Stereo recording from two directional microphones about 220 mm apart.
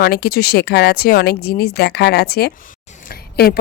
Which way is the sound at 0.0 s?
45° left (ahead or behind).